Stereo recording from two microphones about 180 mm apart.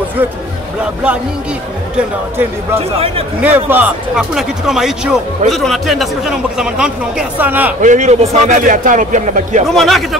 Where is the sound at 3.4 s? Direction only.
10° right (ahead or behind).